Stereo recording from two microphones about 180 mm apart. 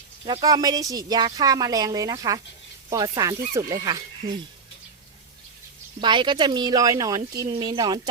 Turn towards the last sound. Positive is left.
turn(degrees=-20)  # may be behind; listen again after turning